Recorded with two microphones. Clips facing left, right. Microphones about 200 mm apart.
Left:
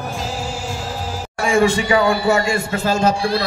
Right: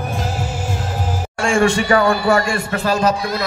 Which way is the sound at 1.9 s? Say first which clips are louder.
Right 1 dB; 20° left (ahead or behind).